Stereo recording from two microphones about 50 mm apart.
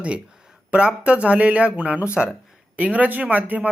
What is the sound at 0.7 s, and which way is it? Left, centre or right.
Speech, right.